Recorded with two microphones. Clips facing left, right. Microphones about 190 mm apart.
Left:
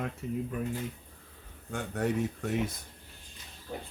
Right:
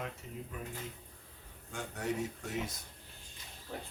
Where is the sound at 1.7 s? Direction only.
60° left (ahead or behind).